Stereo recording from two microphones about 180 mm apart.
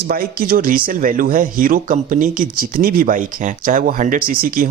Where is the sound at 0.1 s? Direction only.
55° right (ahead or behind).